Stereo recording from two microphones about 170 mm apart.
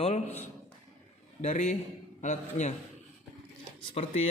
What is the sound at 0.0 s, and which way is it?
Speech, 40° left (ahead or behind).